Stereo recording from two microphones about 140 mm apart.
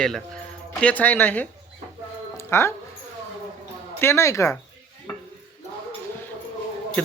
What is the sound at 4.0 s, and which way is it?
Speech, 20° left (ahead or behind).